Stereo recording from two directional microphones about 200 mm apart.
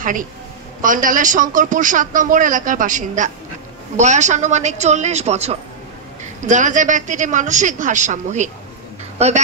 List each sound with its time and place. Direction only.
0.0 s a woman's voice: 40° right (ahead or behind)